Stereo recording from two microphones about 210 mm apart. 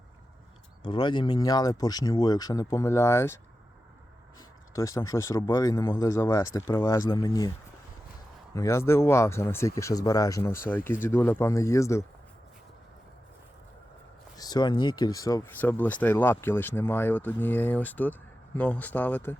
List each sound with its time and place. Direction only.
0.9 s speech: 20° left (ahead or behind)
4.7 s speech: 15° left (ahead or behind)
8.5 s speech: 15° left (ahead or behind)
14.3 s speech: 20° left (ahead or behind)